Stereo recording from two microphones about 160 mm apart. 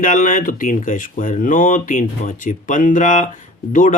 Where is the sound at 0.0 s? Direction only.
55° left (ahead or behind).